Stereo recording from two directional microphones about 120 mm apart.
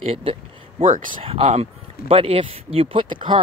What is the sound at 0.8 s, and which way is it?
Speech, 90° right.